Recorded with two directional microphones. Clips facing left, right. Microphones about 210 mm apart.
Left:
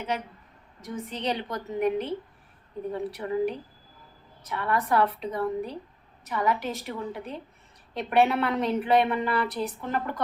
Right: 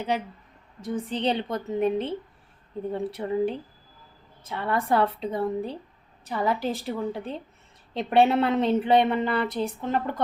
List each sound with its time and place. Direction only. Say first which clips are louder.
0.8 s a woman's voice: right 5 dB; 30° right (ahead or behind)